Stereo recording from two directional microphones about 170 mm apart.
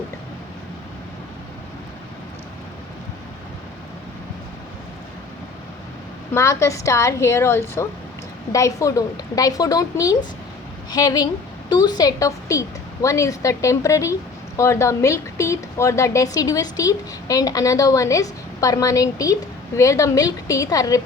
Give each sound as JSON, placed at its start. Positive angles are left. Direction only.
{"t": 6.3, "sound": "a woman's voice", "side_deg": 15}